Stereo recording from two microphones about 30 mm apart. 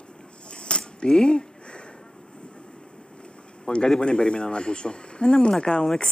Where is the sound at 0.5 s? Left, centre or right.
Left.